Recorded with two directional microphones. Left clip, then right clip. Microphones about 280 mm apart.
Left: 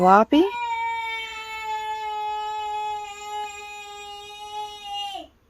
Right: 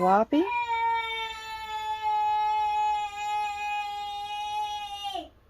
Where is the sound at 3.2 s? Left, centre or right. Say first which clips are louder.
Right 3 dB; left.